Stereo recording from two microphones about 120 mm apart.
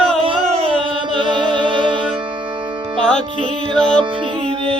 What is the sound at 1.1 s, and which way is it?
Music, 40° right (ahead or behind).